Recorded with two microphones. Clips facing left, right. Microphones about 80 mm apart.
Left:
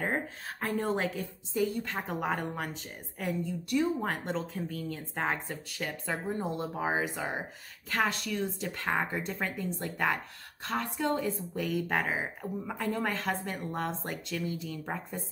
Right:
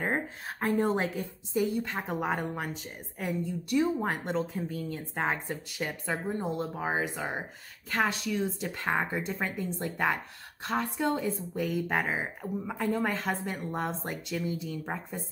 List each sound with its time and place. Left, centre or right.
0.0 s speech: right
1.6 s a woman's voice: centre